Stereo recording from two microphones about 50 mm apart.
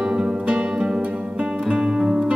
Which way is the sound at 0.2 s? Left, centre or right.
Centre.